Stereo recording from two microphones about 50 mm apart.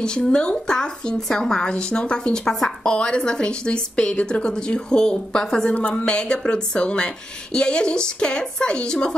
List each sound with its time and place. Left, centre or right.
0.0 s a woman's voice: centre